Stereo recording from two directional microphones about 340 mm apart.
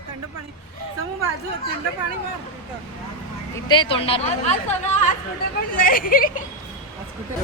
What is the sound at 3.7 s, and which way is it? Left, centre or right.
Speech, centre.